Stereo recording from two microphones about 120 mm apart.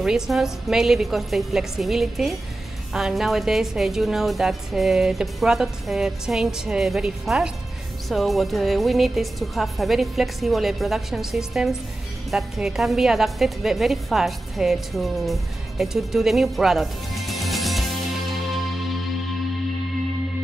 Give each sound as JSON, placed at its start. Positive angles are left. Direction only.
{"t": 0.0, "sound": "a woman's voice", "side_deg": -5}